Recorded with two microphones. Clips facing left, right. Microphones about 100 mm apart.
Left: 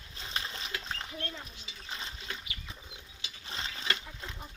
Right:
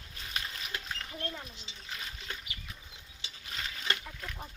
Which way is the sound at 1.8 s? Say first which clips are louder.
Left 1 dB; 25° left (ahead or behind).